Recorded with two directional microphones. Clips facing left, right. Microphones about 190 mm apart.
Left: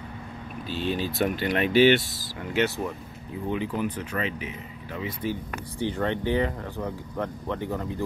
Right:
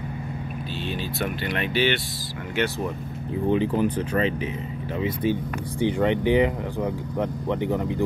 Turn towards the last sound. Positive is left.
turn(degrees=-20)  # may be behind; listen again after turning